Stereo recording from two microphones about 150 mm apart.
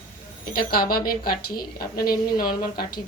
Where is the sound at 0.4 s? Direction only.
80° left.